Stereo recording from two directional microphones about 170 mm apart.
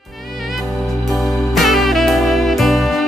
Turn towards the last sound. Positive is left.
turn(degrees=0)  # may be behind; listen again after turning